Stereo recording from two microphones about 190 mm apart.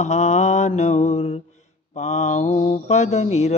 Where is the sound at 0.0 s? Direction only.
35° left (ahead or behind).